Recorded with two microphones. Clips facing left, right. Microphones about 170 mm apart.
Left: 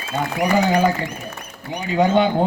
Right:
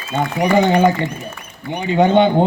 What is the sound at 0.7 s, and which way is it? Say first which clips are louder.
Speech: right 4 dB; 25° right (ahead or behind).